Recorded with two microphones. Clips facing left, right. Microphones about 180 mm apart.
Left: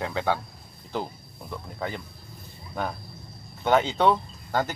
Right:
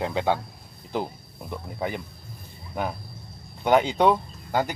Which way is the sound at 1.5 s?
15° right (ahead or behind).